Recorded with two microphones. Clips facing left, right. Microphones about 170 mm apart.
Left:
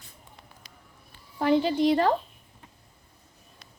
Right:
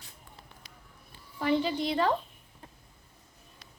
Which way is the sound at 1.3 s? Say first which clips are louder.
Left 5 dB; 50° left (ahead or behind).